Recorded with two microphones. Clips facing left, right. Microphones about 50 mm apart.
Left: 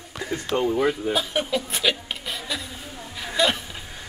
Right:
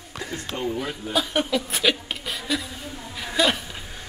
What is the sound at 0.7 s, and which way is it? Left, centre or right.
Speech, left.